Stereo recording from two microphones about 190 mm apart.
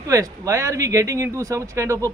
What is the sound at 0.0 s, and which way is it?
A man's voice, 15° right (ahead or behind).